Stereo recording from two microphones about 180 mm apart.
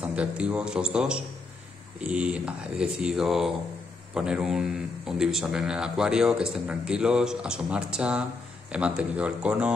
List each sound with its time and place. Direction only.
0.0 s a man's voice: 5° right (ahead or behind)